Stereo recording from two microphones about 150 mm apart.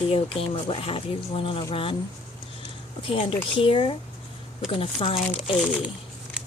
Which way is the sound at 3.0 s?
35° left (ahead or behind).